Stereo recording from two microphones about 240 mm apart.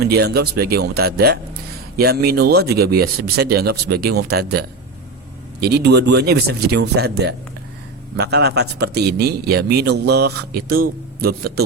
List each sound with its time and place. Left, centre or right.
0.1 s speech: right